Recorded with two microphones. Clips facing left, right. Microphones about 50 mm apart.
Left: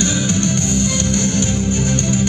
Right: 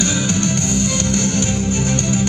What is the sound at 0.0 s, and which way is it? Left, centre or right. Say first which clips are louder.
Music: left 1 dB; right.